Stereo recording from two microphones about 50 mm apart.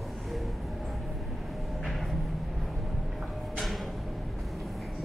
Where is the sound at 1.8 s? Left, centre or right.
Centre.